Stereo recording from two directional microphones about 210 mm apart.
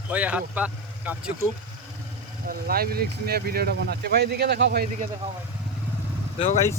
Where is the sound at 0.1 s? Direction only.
5° right (ahead or behind).